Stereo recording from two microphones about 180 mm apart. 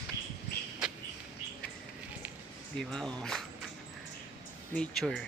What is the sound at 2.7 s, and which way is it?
Speech, 5° left (ahead or behind).